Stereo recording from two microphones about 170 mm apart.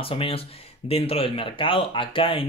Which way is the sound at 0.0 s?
30° left (ahead or behind).